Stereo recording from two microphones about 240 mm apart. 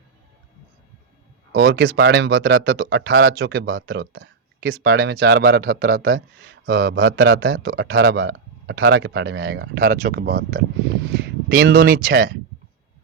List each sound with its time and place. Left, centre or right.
1.5 s speech: right